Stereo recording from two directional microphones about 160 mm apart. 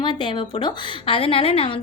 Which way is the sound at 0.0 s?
30° left (ahead or behind).